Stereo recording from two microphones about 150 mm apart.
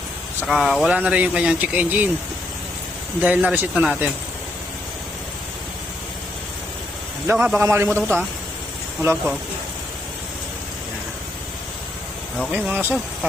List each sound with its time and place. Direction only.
0.4 s speech: centre (ahead or behind)
3.2 s speech: 10° right (ahead or behind)
7.3 s speech: 10° right (ahead or behind)
7.9 s a man's voice: 10° left (ahead or behind)
12.5 s speech: 10° right (ahead or behind)